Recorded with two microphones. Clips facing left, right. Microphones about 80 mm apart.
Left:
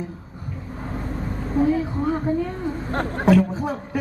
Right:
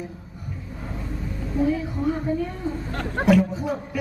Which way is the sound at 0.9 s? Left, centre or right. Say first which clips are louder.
Left 4 dB; left.